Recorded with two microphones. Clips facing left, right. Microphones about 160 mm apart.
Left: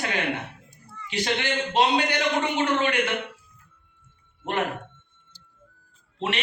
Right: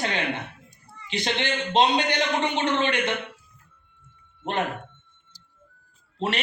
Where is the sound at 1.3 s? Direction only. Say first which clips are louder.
Right 2 dB; 25° right (ahead or behind).